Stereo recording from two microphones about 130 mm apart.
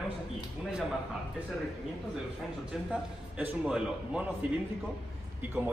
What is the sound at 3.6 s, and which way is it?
Speech, 10° right (ahead or behind).